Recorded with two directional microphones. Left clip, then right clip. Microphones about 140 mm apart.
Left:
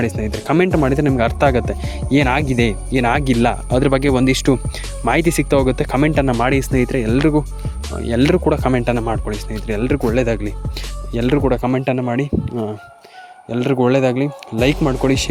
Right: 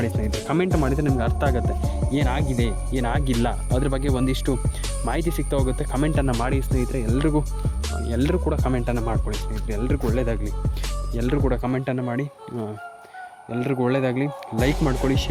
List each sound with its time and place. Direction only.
0.4 s speech: 35° left (ahead or behind)
6.5 s speech: 45° left (ahead or behind)